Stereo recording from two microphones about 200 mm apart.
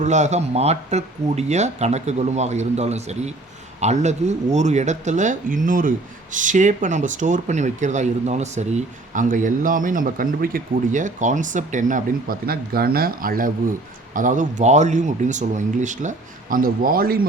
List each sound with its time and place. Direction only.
0.0 s speech: 35° right (ahead or behind)